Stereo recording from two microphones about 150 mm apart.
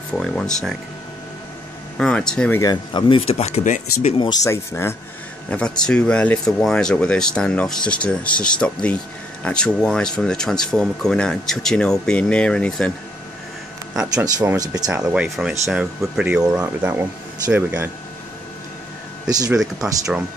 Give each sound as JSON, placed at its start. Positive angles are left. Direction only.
{"t": 0.2, "sound": "speech", "side_deg": 5}
{"t": 2.0, "sound": "speech", "side_deg": 5}
{"t": 2.6, "sound": "speech", "side_deg": 30}
{"t": 4.2, "sound": "speech", "side_deg": 25}
{"t": 5.5, "sound": "speech", "side_deg": 5}
{"t": 14.0, "sound": "speech", "side_deg": -25}
{"t": 14.9, "sound": "speech", "side_deg": -5}
{"t": 19.2, "sound": "speech", "side_deg": -25}
{"t": 19.5, "sound": "speech", "side_deg": -5}